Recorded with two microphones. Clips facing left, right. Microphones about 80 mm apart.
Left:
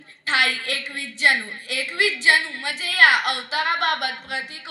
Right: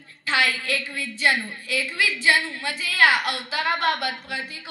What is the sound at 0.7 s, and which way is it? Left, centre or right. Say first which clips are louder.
A woman's voice: right 2 dB; left.